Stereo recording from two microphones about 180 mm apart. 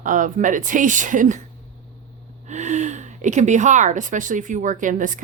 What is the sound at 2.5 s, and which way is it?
Speech, 40° right (ahead or behind).